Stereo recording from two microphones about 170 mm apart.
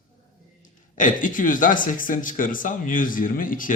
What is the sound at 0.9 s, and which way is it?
Speech, 50° left (ahead or behind).